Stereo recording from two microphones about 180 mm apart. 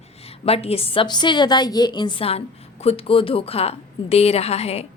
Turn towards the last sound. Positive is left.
turn(degrees=35)  # may be behind; listen again after turning